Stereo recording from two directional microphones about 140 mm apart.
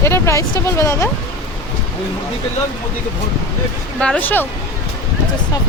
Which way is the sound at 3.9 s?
10° left (ahead or behind).